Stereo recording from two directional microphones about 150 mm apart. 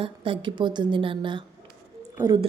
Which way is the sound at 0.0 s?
35° right (ahead or behind).